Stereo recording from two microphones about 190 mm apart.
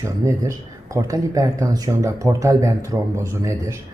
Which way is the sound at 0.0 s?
15° right (ahead or behind).